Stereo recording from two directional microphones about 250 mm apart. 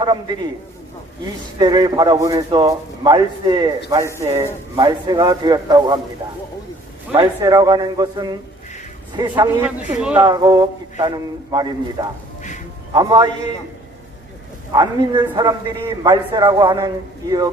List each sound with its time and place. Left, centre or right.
1.5 s a man's voice: centre
7.1 s a man's voice: centre
9.6 s a man's voice: centre
12.4 s music: left
12.9 s a man's voice: centre
14.7 s a man's voice: centre